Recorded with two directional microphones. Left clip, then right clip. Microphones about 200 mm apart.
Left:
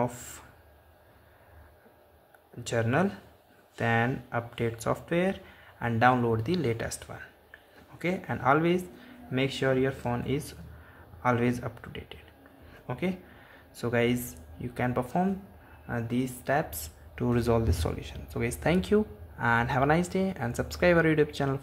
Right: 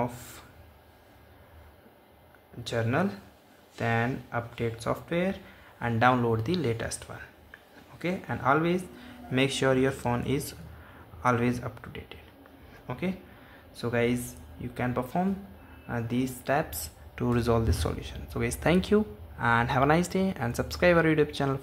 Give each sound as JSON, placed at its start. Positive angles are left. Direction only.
{"t": 0.0, "sound": "speech", "side_deg": 15}
{"t": 2.6, "sound": "speech", "side_deg": 15}
{"t": 9.3, "sound": "speech", "side_deg": 0}